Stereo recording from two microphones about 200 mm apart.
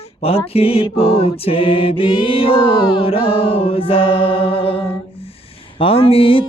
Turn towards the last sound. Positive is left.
turn(degrees=25)  # may be behind; listen again after turning